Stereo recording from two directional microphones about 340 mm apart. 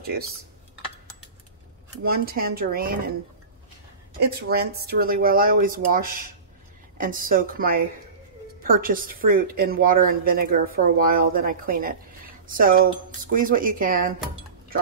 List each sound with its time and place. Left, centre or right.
2.0 s a woman's voice: right
4.3 s a woman's voice: right